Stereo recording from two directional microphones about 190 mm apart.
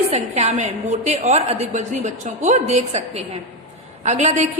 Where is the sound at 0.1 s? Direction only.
35° right (ahead or behind).